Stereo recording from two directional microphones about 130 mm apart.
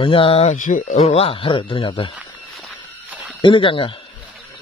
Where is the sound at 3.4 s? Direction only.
40° left (ahead or behind).